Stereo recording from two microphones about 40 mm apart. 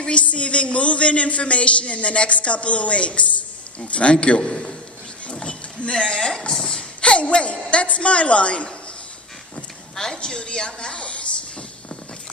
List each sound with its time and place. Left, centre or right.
0.0 s speech: left
5.3 s a sound: left
6.1 s speech: centre
6.5 s a sound: centre
7.0 s speech: left
9.9 s speech: centre; by 11.2 s left